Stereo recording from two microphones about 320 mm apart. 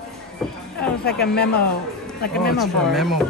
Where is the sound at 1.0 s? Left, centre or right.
Left.